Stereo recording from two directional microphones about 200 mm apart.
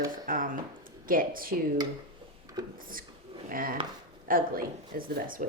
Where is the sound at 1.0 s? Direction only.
45° right (ahead or behind).